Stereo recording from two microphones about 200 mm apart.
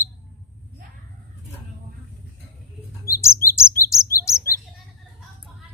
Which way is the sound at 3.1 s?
15° left (ahead or behind).